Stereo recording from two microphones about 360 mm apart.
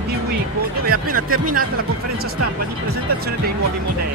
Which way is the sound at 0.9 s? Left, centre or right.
Right.